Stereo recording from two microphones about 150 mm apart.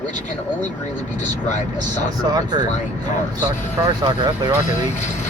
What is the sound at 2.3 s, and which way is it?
Speech, 25° right (ahead or behind).